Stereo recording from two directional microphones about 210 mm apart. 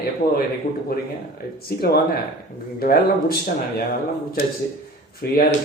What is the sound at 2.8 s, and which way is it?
Speech, 45° left (ahead or behind).